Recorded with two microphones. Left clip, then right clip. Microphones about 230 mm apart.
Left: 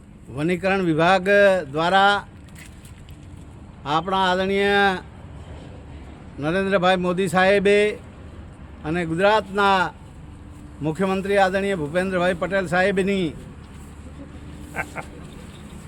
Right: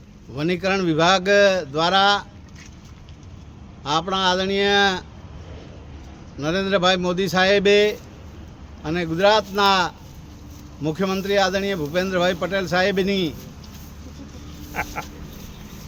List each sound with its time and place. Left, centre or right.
0.3 s speech: centre
3.8 s a man's voice: centre
6.3 s speech: centre
14.7 s a sound: right